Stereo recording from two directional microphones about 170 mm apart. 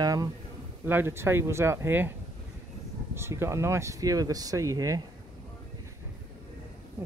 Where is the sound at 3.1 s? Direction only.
15° right (ahead or behind).